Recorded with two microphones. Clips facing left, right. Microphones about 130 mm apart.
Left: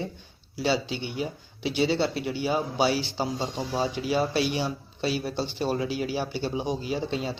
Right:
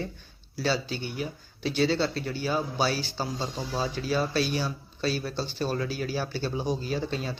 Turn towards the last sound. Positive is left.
turn(degrees=20)  # may be behind; listen again after turning